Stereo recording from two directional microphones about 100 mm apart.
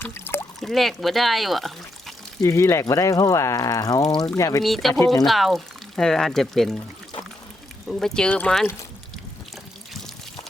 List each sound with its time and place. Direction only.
0.0 s a sound: 20° left (ahead or behind)
0.6 s speech: centre (ahead or behind)
2.4 s speech: 30° left (ahead or behind)
4.6 s speech: centre (ahead or behind)
7.9 s speech: 5° left (ahead or behind)